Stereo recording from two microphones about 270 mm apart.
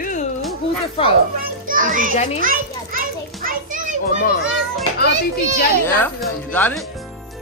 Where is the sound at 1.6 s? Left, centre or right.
Right.